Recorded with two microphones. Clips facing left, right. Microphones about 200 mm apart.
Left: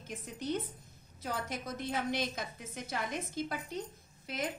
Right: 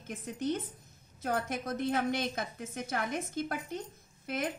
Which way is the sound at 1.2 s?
55° right (ahead or behind).